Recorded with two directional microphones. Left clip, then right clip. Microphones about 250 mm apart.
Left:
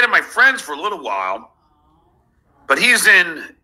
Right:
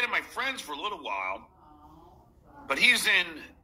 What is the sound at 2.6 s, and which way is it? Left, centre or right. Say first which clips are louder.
Speech: left 10 dB; centre.